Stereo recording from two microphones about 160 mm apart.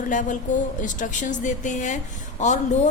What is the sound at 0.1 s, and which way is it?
A woman's voice, 50° left (ahead or behind).